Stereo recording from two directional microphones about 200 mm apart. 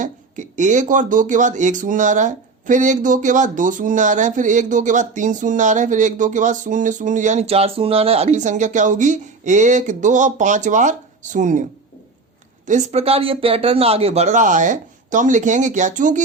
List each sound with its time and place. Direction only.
0.0 s speech: 40° right (ahead or behind)
12.6 s speech: 35° right (ahead or behind)